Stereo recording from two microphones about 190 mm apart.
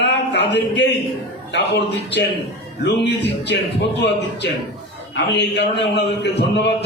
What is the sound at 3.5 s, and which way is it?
A man's voice, 65° left (ahead or behind).